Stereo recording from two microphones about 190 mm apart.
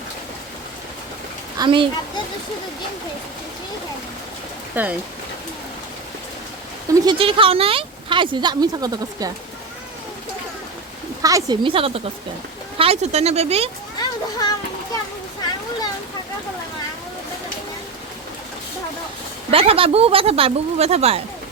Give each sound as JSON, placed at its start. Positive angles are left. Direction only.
{"t": 1.5, "sound": "speech", "side_deg": -25}
{"t": 4.7, "sound": "speech", "side_deg": -10}
{"t": 7.0, "sound": "speech", "side_deg": -25}
{"t": 11.2, "sound": "speech", "side_deg": -20}
{"t": 14.0, "sound": "children playing", "side_deg": 20}
{"t": 19.5, "sound": "speech", "side_deg": -30}